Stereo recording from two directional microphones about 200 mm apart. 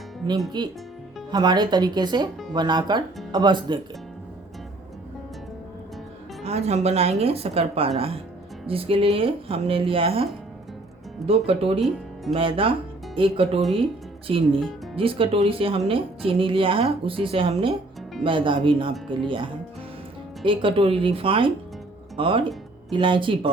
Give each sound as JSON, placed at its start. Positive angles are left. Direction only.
{"t": 0.6, "sound": "speech", "side_deg": -20}
{"t": 6.4, "sound": "speech", "side_deg": -35}
{"t": 11.3, "sound": "speech", "side_deg": -30}